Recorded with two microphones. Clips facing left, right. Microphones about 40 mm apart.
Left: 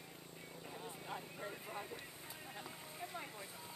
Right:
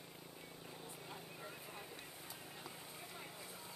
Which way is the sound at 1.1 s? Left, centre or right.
Centre.